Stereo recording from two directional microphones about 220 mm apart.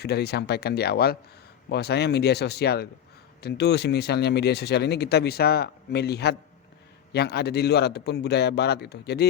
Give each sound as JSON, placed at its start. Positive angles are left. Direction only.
{"t": 0.0, "sound": "speech", "side_deg": 50}